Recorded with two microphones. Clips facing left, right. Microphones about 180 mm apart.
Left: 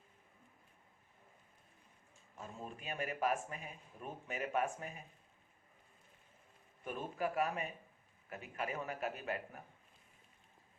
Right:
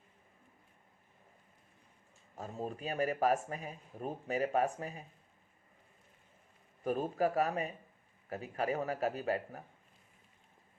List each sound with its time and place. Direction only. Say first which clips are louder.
2.4 s speech: right 8 dB; 40° right (ahead or behind)
6.8 s speech: right 7 dB; 35° right (ahead or behind)